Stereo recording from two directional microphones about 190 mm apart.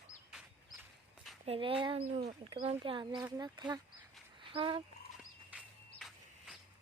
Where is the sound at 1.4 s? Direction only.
30° right (ahead or behind).